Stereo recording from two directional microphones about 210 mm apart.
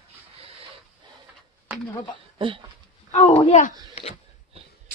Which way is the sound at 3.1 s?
30° left (ahead or behind).